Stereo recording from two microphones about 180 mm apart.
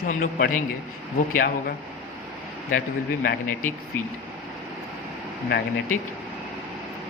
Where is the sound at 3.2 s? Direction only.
60° left (ahead or behind).